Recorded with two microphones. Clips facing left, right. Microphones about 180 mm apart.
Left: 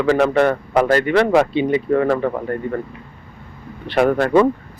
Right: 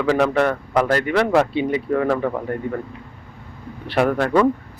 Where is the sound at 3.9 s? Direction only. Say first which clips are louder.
Left 3 dB; 15° left (ahead or behind).